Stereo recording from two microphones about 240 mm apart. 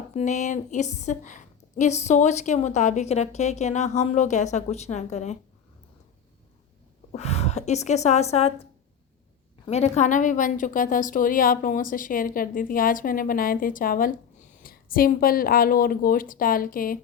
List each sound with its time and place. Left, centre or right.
0.1 s a woman's voice: left
7.1 s a woman's voice: left
9.6 s a woman's voice: left